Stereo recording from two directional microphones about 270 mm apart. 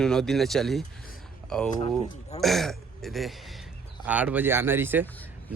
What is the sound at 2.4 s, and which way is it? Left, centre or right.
A man's voice, centre.